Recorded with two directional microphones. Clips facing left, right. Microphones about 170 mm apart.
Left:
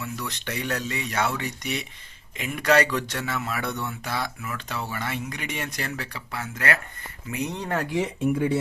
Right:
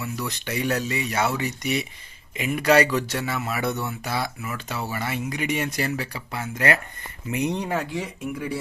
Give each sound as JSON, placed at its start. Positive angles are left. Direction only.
{"t": 0.0, "sound": "speech", "side_deg": -10}
{"t": 7.9, "sound": "speech", "side_deg": 20}